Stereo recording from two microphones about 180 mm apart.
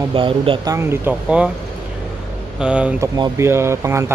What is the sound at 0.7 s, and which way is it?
Speech, 15° right (ahead or behind).